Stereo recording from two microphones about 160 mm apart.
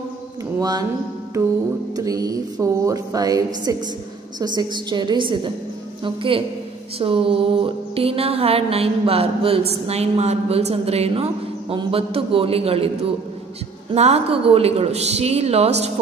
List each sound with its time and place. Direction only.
0.6 s speech: 25° right (ahead or behind)
2.0 s speech: 20° right (ahead or behind)
6.0 s music: 35° right (ahead or behind)
13.9 s music: 40° right (ahead or behind)